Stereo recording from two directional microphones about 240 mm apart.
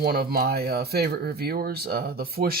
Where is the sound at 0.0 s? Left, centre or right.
Right.